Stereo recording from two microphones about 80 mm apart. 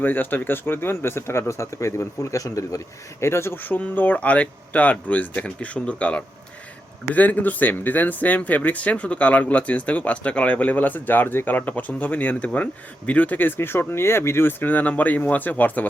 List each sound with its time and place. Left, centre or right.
0.0 s speech: left